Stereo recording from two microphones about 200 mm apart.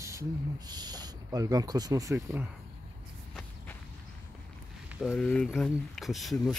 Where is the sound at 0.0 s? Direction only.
15° right (ahead or behind).